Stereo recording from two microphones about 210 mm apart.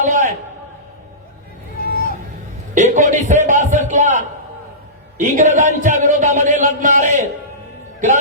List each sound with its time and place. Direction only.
0.0 s a sound: 35° right (ahead or behind)
1.8 s vehicle: 45° left (ahead or behind)
2.7 s a man's voice: 35° right (ahead or behind)